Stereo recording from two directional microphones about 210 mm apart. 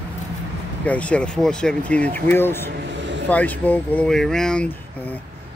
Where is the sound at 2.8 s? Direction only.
60° right (ahead or behind).